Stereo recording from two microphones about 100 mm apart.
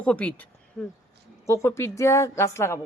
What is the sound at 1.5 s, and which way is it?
A woman's voice, 30° left (ahead or behind).